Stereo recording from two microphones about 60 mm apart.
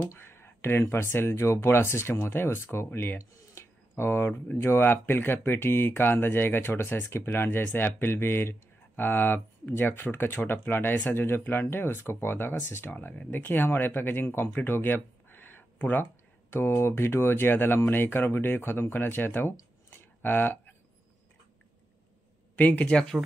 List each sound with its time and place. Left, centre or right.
0.1 s speech: left
20.2 s a sound: left
22.6 s speech: left